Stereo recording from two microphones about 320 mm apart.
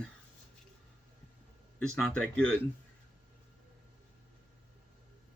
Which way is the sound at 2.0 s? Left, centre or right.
Centre.